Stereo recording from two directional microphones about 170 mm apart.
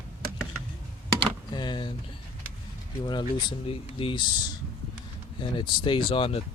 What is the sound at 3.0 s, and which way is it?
Speech, 25° left (ahead or behind).